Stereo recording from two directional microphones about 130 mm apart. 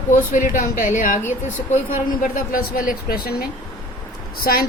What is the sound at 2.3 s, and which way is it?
Speech, 90° left.